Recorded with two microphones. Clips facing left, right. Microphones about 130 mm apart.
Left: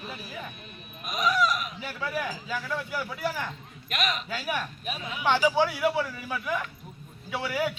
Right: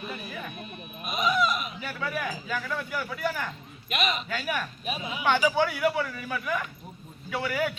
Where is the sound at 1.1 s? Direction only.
Centre (ahead or behind).